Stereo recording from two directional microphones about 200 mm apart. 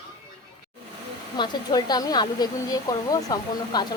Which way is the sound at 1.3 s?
20° left (ahead or behind).